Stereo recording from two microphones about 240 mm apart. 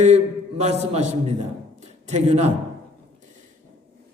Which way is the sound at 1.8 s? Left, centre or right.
Right.